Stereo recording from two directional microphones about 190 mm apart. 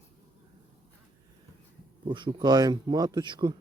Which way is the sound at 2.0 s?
25° right (ahead or behind).